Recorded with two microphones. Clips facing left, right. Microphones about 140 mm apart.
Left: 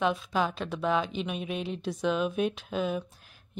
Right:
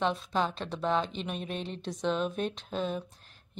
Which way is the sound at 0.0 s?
5° left (ahead or behind).